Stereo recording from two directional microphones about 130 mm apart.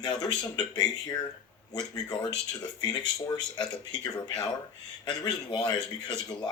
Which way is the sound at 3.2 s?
30° left (ahead or behind).